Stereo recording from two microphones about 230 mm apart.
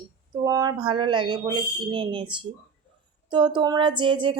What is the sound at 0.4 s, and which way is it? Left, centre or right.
Speech, centre.